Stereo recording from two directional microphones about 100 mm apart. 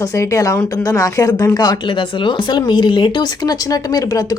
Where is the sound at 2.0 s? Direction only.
55° left (ahead or behind).